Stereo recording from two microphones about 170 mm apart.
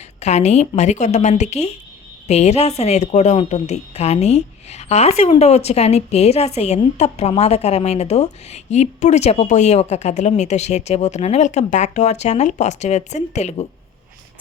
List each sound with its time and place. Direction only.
0.2 s speech: 40° left (ahead or behind)